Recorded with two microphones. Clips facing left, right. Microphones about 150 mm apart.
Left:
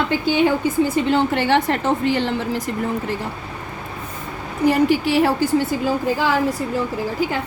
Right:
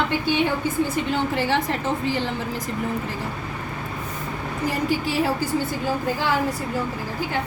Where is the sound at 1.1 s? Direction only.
70° left (ahead or behind).